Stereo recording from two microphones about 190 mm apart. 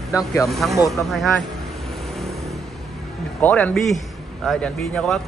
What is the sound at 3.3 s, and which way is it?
Speech, 10° left (ahead or behind).